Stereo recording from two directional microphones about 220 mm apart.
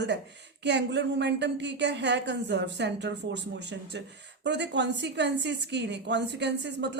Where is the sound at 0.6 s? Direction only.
50° right (ahead or behind).